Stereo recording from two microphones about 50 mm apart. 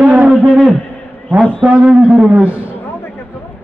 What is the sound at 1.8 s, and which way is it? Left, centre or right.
Speech, right.